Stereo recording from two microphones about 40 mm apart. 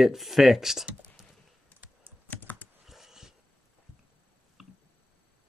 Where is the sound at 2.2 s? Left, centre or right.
Left.